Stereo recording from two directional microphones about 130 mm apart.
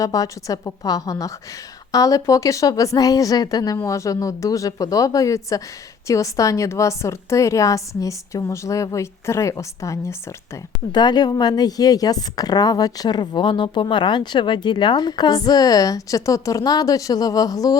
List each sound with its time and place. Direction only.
0.0 s a woman's voice: 25° left (ahead or behind)
10.9 s speech: 35° left (ahead or behind)